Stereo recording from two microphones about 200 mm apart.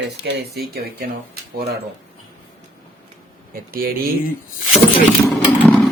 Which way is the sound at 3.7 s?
50° right (ahead or behind).